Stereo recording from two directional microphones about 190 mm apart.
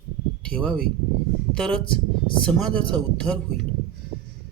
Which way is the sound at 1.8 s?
25° left (ahead or behind).